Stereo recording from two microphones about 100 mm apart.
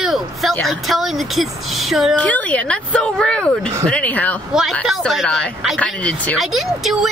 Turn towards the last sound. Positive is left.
turn(degrees=0)  # may be behind; listen again after turning